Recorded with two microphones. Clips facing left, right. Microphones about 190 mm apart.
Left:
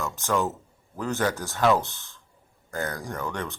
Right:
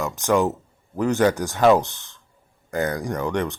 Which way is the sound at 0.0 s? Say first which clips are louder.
Right 6 dB; 15° right (ahead or behind).